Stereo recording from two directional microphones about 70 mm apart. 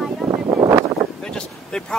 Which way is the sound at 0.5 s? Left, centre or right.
Right.